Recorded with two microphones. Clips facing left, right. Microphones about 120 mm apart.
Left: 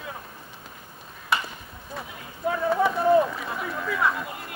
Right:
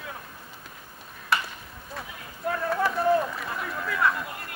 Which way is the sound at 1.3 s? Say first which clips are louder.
Even; centre (ahead or behind).